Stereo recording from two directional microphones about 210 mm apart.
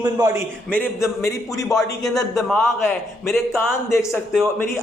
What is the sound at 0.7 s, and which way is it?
A man's voice, 10° left (ahead or behind).